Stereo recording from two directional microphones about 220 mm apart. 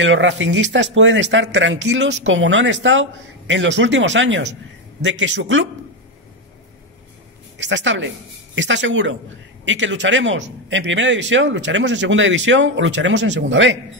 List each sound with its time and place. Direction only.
0.0 s speech: 60° right (ahead or behind)
7.5 s speech: 55° right (ahead or behind)